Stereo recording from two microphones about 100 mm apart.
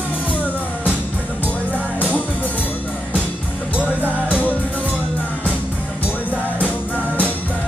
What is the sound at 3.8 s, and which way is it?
Music, 15° left (ahead or behind).